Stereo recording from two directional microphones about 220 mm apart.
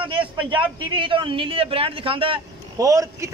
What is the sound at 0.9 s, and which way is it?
A man's voice, 20° right (ahead or behind).